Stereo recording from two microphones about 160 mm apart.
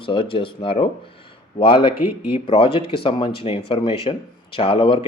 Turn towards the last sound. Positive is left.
turn(degrees=35)  # may be behind; listen again after turning